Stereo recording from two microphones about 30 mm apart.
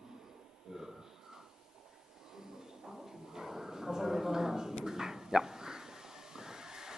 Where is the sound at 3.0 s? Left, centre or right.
Centre.